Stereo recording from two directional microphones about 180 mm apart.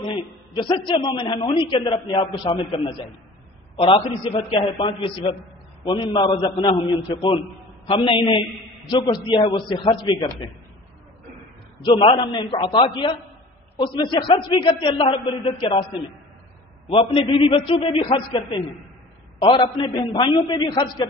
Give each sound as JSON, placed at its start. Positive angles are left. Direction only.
{"t": 0.6, "sound": "a man's voice", "side_deg": 25}
{"t": 11.8, "sound": "a man's voice", "side_deg": 30}
{"t": 16.9, "sound": "a man's voice", "side_deg": 30}